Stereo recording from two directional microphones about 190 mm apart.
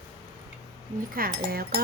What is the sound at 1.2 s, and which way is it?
Speech, 50° right (ahead or behind).